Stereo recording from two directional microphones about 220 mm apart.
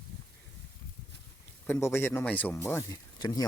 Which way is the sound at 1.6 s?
10° left (ahead or behind).